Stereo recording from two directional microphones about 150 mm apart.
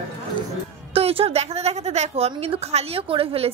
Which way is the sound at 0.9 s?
40° right (ahead or behind).